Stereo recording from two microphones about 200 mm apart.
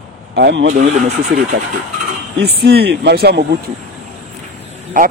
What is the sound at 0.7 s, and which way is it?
Speech, 40° right (ahead or behind).